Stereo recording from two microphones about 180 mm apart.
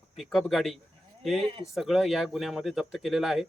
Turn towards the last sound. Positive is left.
turn(degrees=0)  # may be behind; listen again after turning